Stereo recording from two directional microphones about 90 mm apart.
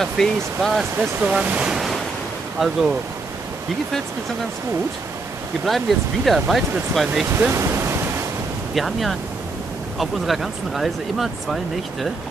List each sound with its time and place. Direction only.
0.2 s speech: 5° left (ahead or behind)
0.9 s speech: 15° right (ahead or behind)
5.7 s speech: centre (ahead or behind)
7.3 s waves: 30° right (ahead or behind)
8.7 s speech: centre (ahead or behind)